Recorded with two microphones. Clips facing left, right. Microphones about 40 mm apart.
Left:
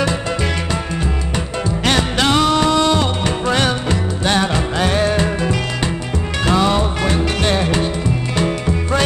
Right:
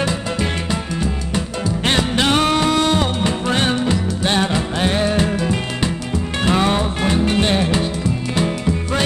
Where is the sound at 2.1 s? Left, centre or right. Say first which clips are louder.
Left 2 dB; right.